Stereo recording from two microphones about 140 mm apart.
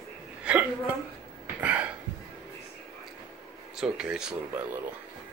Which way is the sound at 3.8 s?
5° right (ahead or behind).